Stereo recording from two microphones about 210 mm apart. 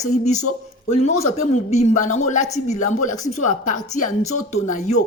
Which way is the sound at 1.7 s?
30° left (ahead or behind).